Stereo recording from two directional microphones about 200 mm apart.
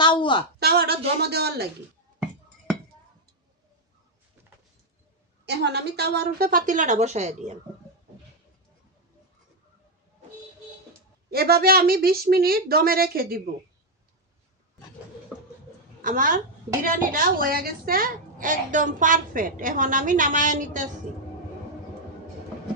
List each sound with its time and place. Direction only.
0.0 s a sound: 25° left (ahead or behind)
0.6 s a woman's voice: 50° right (ahead or behind)
2.1 s chink: centre (ahead or behind)
5.5 s a woman's voice: 55° right (ahead or behind); by 7.6 s 35° right (ahead or behind)
11.3 s a woman's voice: 50° right (ahead or behind)
16.0 s a woman's voice: 40° right (ahead or behind)